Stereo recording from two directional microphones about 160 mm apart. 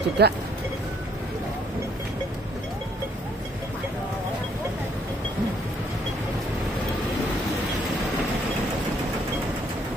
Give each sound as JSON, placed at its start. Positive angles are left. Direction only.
{"t": 0.2, "sound": "speech", "side_deg": -90}